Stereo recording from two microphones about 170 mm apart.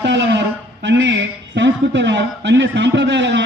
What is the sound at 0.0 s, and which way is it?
A man's voice, 90° right.